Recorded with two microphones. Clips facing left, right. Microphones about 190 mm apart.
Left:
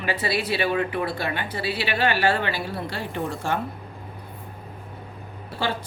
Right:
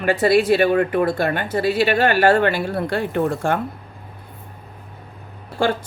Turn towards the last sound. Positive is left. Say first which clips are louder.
# right 7 dB
turn(degrees=-50)  # may be behind; listen again after turning